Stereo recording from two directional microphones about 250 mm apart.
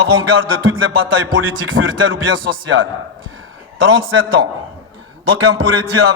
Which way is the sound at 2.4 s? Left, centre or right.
Right.